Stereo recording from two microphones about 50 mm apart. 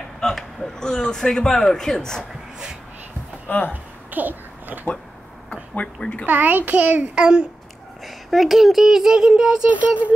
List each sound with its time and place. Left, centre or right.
0.2 s a man's voice: centre
3.4 s speech: left
3.7 s a sound: right
5.5 s speech: left
6.2 s a child's voice: right
8.0 s speech: centre